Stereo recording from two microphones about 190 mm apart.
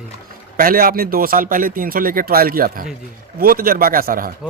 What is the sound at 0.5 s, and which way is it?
A man's voice, 50° right (ahead or behind).